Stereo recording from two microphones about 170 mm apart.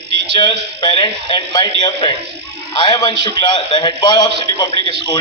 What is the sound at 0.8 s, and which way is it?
A man's voice, 30° left (ahead or behind).